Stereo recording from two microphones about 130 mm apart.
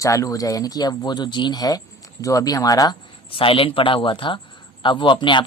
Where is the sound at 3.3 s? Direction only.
45° left (ahead or behind).